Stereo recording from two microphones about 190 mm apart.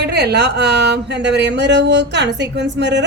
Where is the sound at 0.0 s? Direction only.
60° right (ahead or behind).